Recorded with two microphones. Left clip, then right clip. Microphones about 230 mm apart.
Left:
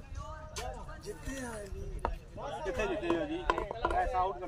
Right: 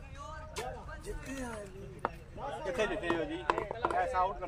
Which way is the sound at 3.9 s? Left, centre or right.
Right.